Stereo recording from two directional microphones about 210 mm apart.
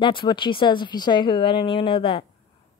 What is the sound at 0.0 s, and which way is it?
A woman's voice, 25° left (ahead or behind).